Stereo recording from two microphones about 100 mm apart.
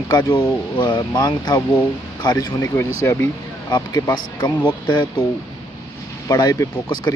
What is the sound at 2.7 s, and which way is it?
Speech, 30° left (ahead or behind).